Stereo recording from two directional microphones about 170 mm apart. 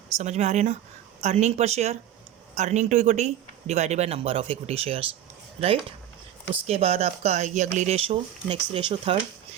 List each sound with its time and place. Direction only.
0.2 s speech: 40° right (ahead or behind)
6.7 s speech: 35° right (ahead or behind)